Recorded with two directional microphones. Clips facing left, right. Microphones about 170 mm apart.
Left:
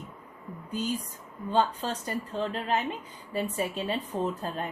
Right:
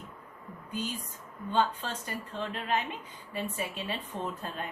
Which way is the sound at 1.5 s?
40° left (ahead or behind).